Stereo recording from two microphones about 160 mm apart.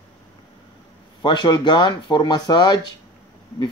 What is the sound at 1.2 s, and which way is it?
Speech, 30° left (ahead or behind).